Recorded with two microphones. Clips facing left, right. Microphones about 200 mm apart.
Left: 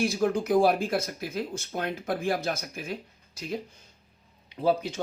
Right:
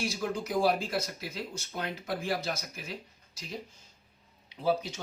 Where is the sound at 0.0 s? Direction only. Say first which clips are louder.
Left 7 dB; 55° left (ahead or behind).